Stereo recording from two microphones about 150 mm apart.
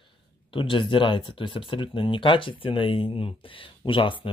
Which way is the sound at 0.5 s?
35° left (ahead or behind).